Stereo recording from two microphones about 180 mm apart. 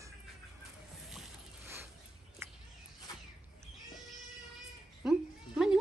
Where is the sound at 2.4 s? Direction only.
15° right (ahead or behind).